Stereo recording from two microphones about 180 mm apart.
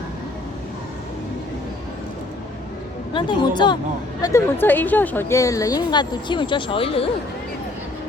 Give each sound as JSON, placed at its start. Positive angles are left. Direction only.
{"t": 3.1, "sound": "a woman's voice", "side_deg": 25}